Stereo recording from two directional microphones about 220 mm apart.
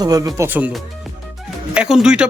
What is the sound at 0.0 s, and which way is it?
Speech, 15° right (ahead or behind).